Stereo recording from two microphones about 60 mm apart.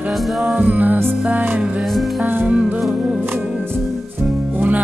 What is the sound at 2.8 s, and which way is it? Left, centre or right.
Music, centre.